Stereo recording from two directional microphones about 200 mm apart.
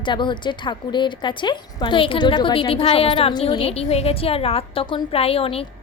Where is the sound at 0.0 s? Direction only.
25° left (ahead or behind).